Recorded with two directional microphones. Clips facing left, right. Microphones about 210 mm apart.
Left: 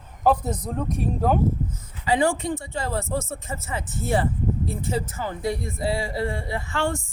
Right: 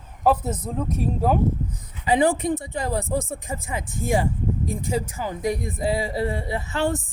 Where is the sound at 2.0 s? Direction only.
20° right (ahead or behind).